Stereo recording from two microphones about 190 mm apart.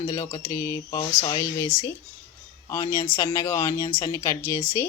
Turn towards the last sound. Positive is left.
turn(degrees=15)  # may be behind; listen again after turning